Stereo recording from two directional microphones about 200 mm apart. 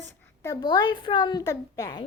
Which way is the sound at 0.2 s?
15° left (ahead or behind).